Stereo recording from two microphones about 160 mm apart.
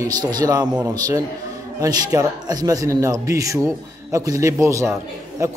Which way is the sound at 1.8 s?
20° right (ahead or behind).